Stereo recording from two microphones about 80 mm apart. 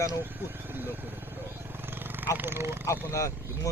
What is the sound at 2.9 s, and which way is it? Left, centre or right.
Speech, left.